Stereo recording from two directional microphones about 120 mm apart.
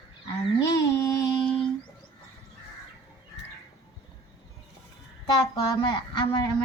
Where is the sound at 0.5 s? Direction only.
25° left (ahead or behind).